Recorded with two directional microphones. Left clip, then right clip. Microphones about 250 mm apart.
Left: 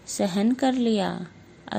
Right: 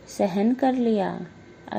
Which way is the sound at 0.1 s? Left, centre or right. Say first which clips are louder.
Right 2 dB; left.